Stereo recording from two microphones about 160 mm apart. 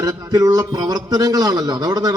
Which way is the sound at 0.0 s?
25° right (ahead or behind).